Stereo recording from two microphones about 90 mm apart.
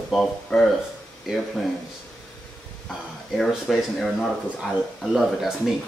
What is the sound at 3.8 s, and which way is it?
Speech, centre (ahead or behind).